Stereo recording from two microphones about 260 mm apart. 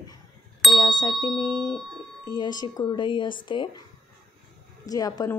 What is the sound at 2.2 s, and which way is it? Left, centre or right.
Speech, centre.